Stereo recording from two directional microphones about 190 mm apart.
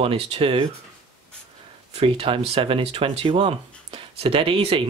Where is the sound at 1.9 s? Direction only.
30° right (ahead or behind).